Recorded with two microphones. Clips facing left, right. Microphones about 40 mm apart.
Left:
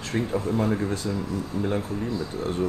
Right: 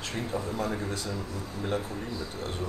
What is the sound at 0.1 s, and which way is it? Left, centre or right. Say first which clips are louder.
Speech: left 9 dB; left.